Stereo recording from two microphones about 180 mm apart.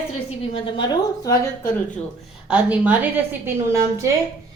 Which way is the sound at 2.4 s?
5° right (ahead or behind).